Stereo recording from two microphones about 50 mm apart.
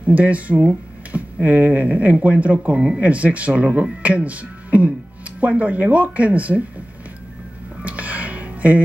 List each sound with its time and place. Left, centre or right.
0.0 s speech: right
7.8 s music: right